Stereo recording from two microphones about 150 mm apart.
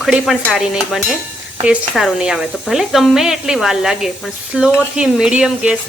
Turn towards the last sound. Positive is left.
turn(degrees=-5)  # may be behind; listen again after turning